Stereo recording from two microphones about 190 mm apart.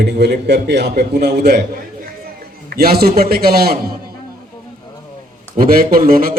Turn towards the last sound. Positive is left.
turn(degrees=-50)  # may be behind; listen again after turning